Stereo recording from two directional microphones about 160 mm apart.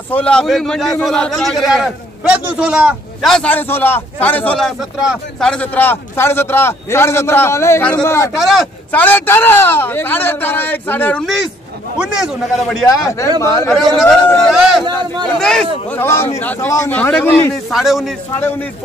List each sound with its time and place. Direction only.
0.1 s a man's voice: 5° left (ahead or behind)
3.3 s a man's voice: 5° left (ahead or behind)
8.4 s a man's voice: centre (ahead or behind)
8.9 s a man's voice: 10° left (ahead or behind)
12.0 s a man's voice: 5° right (ahead or behind)
13.0 s a man's voice: 20° left (ahead or behind)
14.0 s a man's voice: 5° left (ahead or behind)
16.0 s a man's voice: 15° left (ahead or behind)
17.7 s a man's voice: centre (ahead or behind)